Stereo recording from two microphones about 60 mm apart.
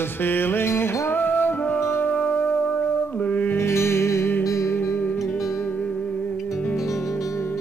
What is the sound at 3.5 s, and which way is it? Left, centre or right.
Music, left.